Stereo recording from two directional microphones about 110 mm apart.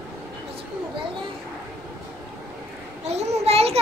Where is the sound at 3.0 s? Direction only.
75° right (ahead or behind).